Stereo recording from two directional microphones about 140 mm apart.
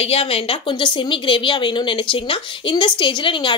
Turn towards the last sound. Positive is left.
turn(degrees=35)  # may be behind; listen again after turning